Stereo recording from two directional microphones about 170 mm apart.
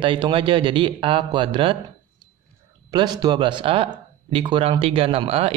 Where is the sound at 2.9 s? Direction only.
25° right (ahead or behind).